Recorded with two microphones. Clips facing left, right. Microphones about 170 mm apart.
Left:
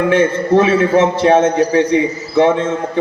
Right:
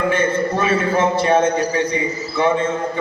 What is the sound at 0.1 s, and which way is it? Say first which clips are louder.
A man's voice: left 6 dB; 90° left.